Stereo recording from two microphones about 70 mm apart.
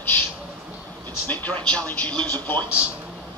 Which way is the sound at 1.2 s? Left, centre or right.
Left.